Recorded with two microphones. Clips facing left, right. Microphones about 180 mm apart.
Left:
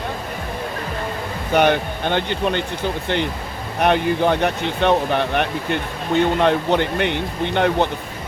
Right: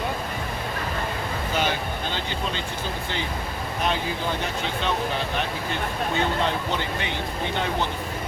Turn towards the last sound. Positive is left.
turn(degrees=60)  # may be behind; listen again after turning